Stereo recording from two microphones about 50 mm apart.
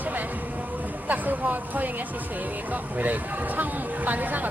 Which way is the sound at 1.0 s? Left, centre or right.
Right.